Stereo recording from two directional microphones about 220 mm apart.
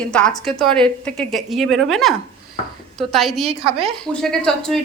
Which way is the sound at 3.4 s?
25° right (ahead or behind).